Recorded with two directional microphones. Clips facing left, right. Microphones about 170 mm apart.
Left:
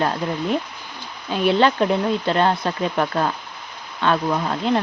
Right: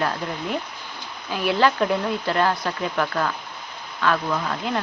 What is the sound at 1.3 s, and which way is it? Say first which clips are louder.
Speech: left 3 dB; 25° left (ahead or behind).